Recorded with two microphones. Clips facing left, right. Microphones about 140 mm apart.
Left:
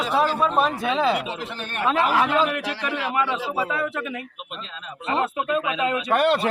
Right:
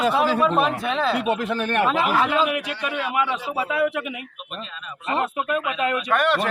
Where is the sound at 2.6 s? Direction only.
35° left (ahead or behind).